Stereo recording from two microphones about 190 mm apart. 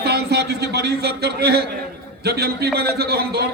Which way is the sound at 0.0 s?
60° right (ahead or behind).